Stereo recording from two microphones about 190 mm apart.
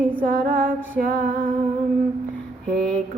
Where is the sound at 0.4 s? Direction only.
45° right (ahead or behind).